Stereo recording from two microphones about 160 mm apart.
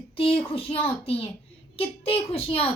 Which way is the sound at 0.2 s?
35° left (ahead or behind).